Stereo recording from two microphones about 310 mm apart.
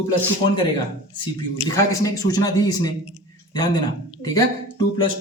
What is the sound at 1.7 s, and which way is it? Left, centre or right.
Speech, centre.